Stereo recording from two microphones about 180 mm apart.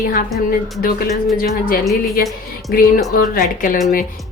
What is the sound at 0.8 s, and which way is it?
A woman's voice, 55° left (ahead or behind).